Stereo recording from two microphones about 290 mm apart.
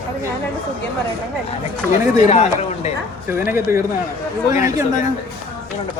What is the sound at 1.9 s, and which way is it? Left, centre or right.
Speech, left.